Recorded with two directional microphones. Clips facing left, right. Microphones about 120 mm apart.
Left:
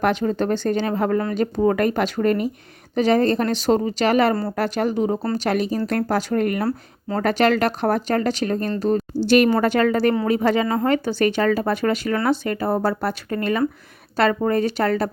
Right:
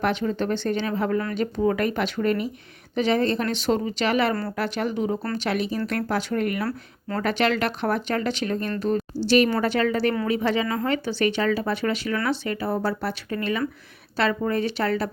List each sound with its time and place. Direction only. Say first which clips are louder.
0.0 s speech: left 4 dB; 40° left (ahead or behind)